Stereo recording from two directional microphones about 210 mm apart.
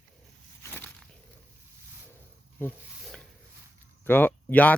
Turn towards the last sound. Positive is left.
turn(degrees=5)  # may be behind; listen again after turning